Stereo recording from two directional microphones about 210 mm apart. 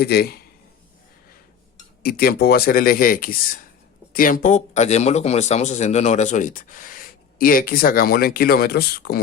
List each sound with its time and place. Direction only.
0.0 s speech: 50° left (ahead or behind)
2.0 s speech: 45° left (ahead or behind)